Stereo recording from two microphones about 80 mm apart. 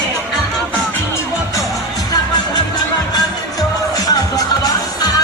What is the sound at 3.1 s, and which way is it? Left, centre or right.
Music, left.